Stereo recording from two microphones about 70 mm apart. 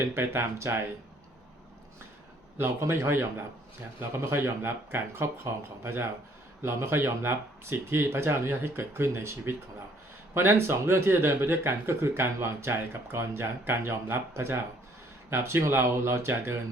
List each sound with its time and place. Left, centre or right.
0.1 s speech: right
2.6 s speech: right